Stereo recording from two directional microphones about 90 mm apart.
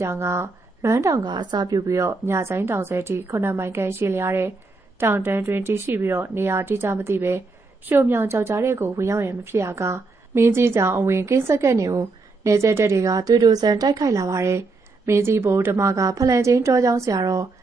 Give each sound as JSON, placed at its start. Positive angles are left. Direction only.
{"t": 0.0, "sound": "a woman's voice", "side_deg": -30}
{"t": 1.3, "sound": "a woman's voice", "side_deg": -50}
{"t": 1.9, "sound": "a woman's voice", "side_deg": -35}